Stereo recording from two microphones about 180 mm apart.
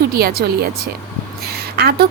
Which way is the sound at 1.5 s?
60° right (ahead or behind).